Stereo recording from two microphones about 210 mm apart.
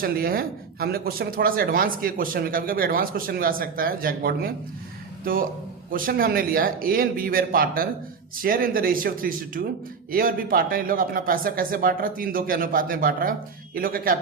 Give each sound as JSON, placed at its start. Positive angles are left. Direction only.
{"t": 0.0, "sound": "speech", "side_deg": -45}
{"t": 5.9, "sound": "speech", "side_deg": -40}